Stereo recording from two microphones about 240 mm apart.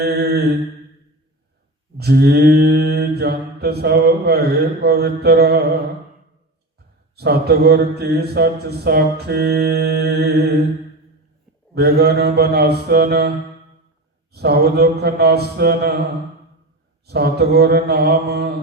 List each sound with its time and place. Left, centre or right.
0.0 s mantra: right
2.0 s mantra: right
7.2 s mantra: right
11.7 s mantra: right
14.3 s mantra: right
17.1 s mantra: right